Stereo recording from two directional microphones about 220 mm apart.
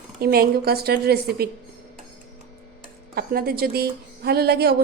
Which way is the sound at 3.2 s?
45° right (ahead or behind).